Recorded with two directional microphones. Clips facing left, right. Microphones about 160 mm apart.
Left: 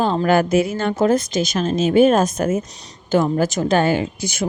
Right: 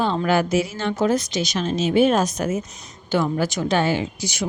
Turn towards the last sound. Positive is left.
turn(degrees=50)  # may be behind; listen again after turning